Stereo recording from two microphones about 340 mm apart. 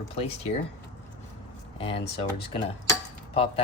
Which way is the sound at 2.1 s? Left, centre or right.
Centre.